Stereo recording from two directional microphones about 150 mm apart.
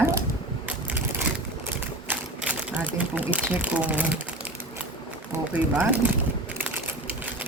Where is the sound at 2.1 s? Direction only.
10° right (ahead or behind).